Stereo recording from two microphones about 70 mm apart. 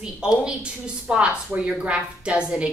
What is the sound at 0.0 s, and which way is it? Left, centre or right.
A woman's voice, centre.